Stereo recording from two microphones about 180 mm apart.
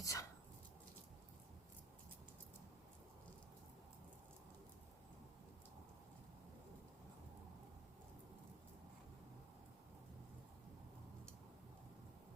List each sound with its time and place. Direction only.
0.0 s dog: 20° left (ahead or behind)